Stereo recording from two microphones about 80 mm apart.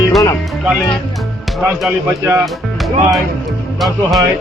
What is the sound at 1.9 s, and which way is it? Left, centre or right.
Speech, right.